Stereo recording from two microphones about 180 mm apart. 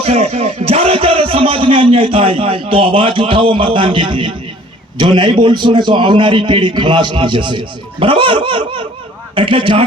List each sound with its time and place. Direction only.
0.0 s speech: 35° right (ahead or behind)